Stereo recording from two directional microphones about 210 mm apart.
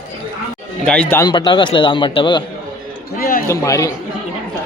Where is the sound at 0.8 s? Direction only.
5° left (ahead or behind); by 2.4 s 20° left (ahead or behind).